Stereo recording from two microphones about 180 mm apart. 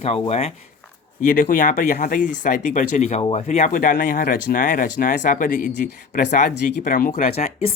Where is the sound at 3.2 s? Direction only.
30° left (ahead or behind).